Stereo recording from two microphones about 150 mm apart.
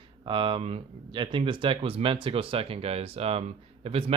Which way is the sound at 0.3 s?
35° right (ahead or behind).